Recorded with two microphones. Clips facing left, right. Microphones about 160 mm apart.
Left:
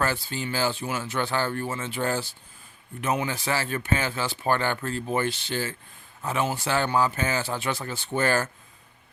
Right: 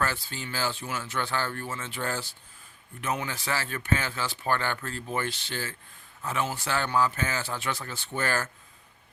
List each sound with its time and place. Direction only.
0.0 s speech: 20° left (ahead or behind)